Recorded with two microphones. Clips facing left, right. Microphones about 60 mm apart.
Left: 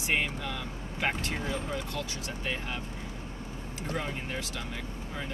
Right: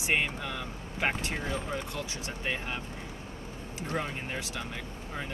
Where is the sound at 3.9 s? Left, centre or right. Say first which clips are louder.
Right 1 dB; right.